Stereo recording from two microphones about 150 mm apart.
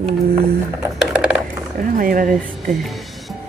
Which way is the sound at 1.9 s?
65° right (ahead or behind).